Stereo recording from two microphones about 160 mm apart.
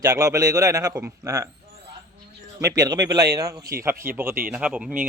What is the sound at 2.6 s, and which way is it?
Speech, 20° right (ahead or behind).